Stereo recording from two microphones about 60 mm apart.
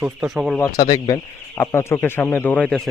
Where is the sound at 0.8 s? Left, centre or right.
Left.